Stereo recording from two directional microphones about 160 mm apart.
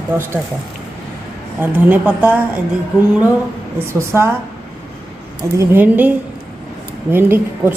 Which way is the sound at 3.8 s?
15° right (ahead or behind).